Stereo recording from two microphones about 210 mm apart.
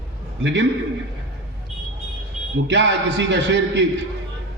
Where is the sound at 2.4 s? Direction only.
Centre (ahead or behind).